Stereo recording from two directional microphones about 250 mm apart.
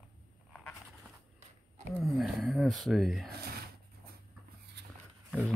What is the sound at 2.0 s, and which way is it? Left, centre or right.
Speech, centre.